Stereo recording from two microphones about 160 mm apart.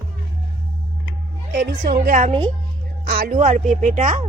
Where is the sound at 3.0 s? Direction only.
75° right (ahead or behind).